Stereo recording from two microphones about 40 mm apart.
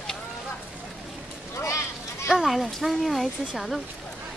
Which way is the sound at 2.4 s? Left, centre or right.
Centre.